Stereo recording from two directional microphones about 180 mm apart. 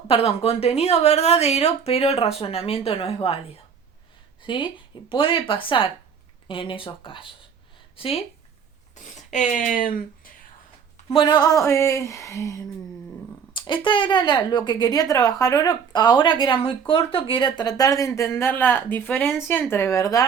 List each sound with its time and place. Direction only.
0.1 s a woman's voice: 35° left (ahead or behind)
4.4 s a woman's voice: 30° left (ahead or behind)
9.0 s speech: 40° left (ahead or behind)
11.1 s speech: 25° left (ahead or behind)
13.5 s speech: 25° left (ahead or behind)